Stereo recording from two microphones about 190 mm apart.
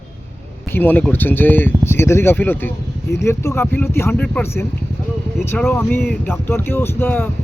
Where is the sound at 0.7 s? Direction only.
10° left (ahead or behind).